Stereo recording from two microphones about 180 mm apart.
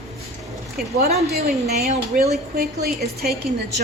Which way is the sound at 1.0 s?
35° right (ahead or behind).